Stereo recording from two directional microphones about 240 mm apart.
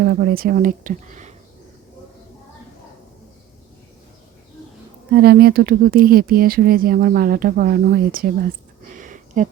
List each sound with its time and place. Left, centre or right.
0.0 s speech: right
5.1 s speech: right
8.8 s a sound: right